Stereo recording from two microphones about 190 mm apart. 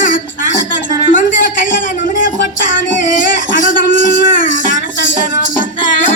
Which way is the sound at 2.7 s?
45° left (ahead or behind).